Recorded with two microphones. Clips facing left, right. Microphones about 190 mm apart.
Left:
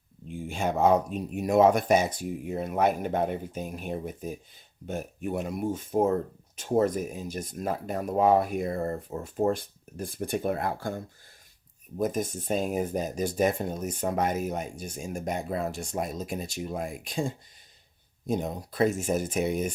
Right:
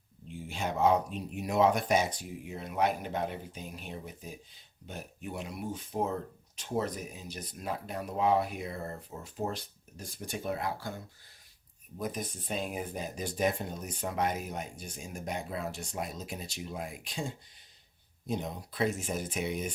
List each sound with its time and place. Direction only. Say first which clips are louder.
0.3 s speech: left 6 dB; 50° left (ahead or behind)